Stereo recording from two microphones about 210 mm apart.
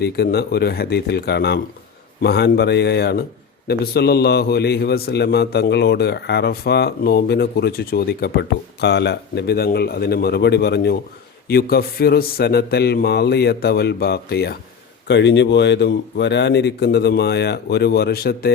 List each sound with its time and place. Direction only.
0.0 s a man's voice: 50° left (ahead or behind)